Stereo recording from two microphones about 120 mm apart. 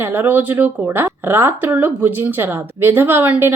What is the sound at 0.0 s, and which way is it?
Speech, 15° right (ahead or behind).